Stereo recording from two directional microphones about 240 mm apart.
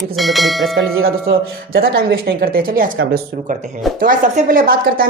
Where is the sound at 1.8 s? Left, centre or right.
Right.